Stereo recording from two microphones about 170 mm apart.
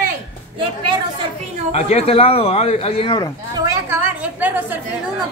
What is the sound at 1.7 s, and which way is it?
Speech, 35° left (ahead or behind).